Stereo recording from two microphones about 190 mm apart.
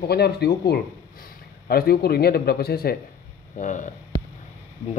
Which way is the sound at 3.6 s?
40° left (ahead or behind).